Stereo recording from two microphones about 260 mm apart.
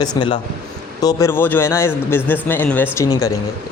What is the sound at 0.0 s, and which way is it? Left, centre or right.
Speech, centre.